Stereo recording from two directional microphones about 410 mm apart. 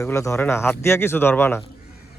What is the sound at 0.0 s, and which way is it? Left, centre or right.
Speech, centre.